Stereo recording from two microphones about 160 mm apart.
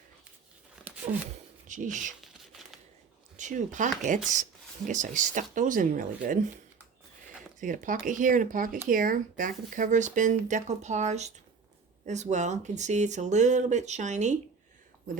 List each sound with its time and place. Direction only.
1.6 s speech: 50° right (ahead or behind)
3.3 s speech: 50° right (ahead or behind)
7.6 s speech: 55° right (ahead or behind)